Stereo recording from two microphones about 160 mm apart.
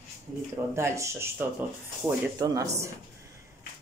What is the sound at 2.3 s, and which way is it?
Speech, 20° right (ahead or behind).